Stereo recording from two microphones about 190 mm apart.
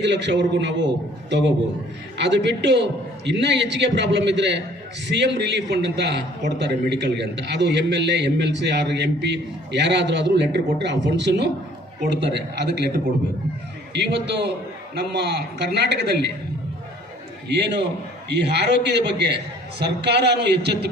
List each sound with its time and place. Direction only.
0.0 s a man's voice: 65° right (ahead or behind)
13.9 s a man's voice: 65° right (ahead or behind)
17.5 s a man's voice: 65° right (ahead or behind)